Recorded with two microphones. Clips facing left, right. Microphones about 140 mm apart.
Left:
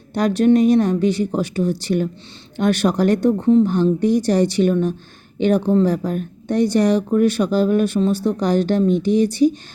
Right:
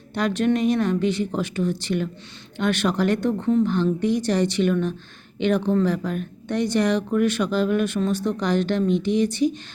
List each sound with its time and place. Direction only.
0.1 s a woman's voice: 40° left (ahead or behind)